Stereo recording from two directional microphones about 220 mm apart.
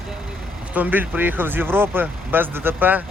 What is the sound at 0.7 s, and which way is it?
Speech, 5° right (ahead or behind).